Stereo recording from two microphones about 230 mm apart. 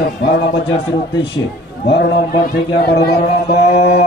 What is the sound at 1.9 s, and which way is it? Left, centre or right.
A man's voice, left.